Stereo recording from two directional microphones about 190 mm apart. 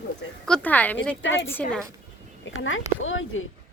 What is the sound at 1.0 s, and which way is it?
Speech, 10° left (ahead or behind).